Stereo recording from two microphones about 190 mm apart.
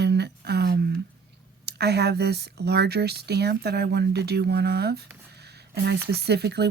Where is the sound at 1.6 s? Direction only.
60° right (ahead or behind).